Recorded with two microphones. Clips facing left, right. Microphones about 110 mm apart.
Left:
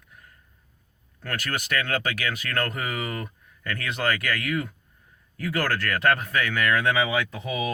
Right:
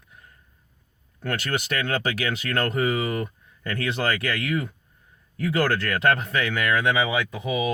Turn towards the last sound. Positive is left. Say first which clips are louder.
# right 2 dB
turn(degrees=-15)  # may be behind; listen again after turning